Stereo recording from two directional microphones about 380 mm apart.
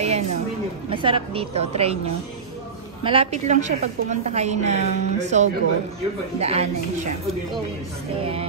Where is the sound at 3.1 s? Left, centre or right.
Centre.